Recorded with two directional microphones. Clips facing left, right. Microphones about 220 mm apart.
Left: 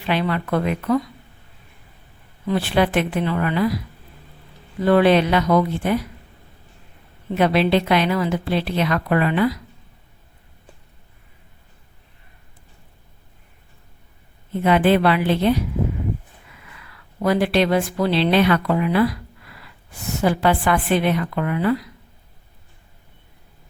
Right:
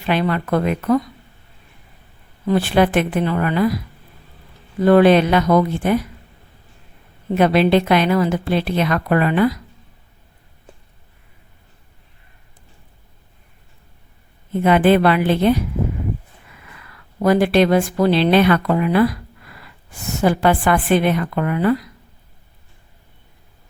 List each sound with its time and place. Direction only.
0.1 s a woman's voice: 50° right (ahead or behind)
2.5 s a woman's voice: 45° right (ahead or behind)
4.9 s a woman's voice: 45° right (ahead or behind)
7.3 s a woman's voice: 50° right (ahead or behind)
14.6 s a woman's voice: 50° right (ahead or behind)
16.8 s a woman's voice: 45° right (ahead or behind)